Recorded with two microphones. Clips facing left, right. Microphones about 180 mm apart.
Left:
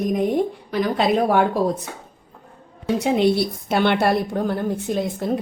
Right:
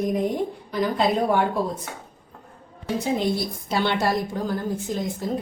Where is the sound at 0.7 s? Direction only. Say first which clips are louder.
Even; 75° left (ahead or behind).